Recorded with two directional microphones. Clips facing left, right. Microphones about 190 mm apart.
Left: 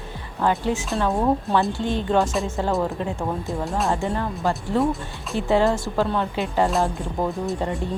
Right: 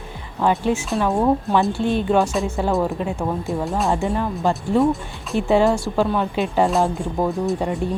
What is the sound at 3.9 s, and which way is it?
Speech, 15° right (ahead or behind).